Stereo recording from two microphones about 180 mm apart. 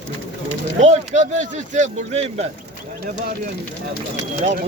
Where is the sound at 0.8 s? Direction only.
40° right (ahead or behind).